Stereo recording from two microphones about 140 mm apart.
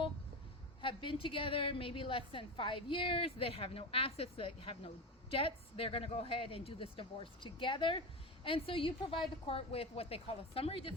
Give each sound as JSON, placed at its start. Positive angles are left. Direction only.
{"t": 0.8, "sound": "a woman's voice", "side_deg": 40}